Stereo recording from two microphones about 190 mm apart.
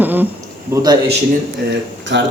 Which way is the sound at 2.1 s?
70° right (ahead or behind).